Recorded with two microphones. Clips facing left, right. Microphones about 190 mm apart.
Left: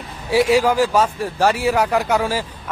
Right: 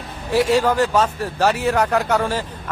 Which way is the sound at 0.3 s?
10° left (ahead or behind).